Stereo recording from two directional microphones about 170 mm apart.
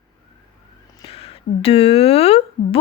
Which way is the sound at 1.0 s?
35° left (ahead or behind).